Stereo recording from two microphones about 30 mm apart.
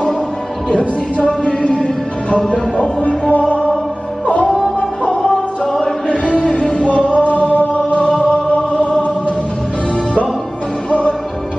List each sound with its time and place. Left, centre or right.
0.7 s music: left
4.7 s music: left
5.7 s choir: centre
6.6 s music: left
7.1 s music: left